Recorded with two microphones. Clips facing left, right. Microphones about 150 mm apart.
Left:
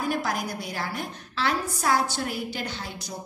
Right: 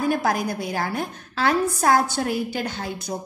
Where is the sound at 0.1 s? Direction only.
50° right (ahead or behind).